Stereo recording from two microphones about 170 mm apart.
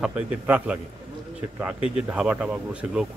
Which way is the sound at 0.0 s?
10° right (ahead or behind).